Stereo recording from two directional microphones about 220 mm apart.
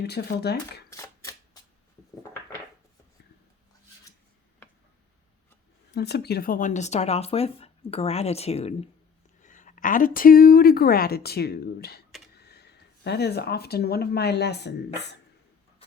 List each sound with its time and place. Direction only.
0.0 s a woman's voice: 50° left (ahead or behind)
0.9 s a sound: 15° left (ahead or behind)
5.9 s a woman's voice: 50° left (ahead or behind)